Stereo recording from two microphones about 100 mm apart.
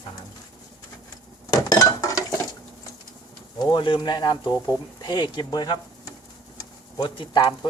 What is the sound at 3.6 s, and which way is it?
Speech, 50° left (ahead or behind).